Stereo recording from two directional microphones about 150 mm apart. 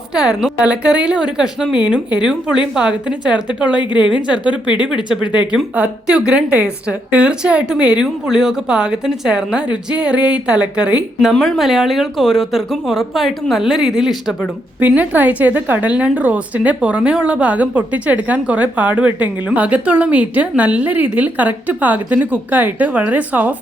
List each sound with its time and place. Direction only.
0.1 s a woman's voice: 5° right (ahead or behind)
4.7 s speech: 30° left (ahead or behind)
5.0 s a woman's voice: 5° right (ahead or behind)